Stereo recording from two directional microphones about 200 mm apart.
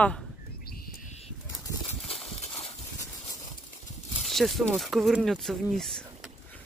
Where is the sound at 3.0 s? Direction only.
15° left (ahead or behind).